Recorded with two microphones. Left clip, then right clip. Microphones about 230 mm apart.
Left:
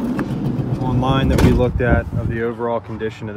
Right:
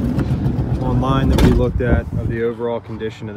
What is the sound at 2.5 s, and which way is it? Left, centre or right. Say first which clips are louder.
Speech: left 1 dB; left.